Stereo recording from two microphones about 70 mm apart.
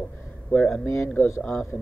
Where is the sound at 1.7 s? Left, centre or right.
Left.